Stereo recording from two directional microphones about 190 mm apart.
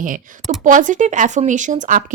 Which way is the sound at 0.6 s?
40° right (ahead or behind).